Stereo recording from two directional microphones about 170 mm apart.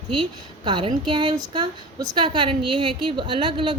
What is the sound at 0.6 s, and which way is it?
A woman's voice, 30° right (ahead or behind).